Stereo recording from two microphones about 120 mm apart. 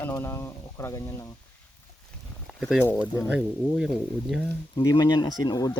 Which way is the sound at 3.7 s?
5° right (ahead or behind).